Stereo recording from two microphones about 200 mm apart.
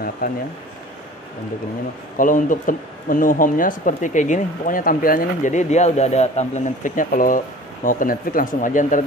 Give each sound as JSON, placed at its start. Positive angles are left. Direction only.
{"t": 0.2, "sound": "speech", "side_deg": 45}
{"t": 2.1, "sound": "speech", "side_deg": 40}